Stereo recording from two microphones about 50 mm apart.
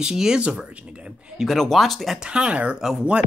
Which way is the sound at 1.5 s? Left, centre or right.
Centre.